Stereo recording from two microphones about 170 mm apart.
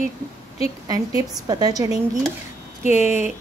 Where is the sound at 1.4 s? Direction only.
25° right (ahead or behind).